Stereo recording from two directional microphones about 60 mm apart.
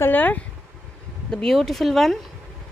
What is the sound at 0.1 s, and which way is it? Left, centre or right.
Speech, left.